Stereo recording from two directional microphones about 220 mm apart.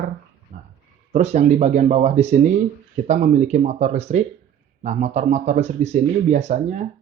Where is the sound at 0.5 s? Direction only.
35° right (ahead or behind).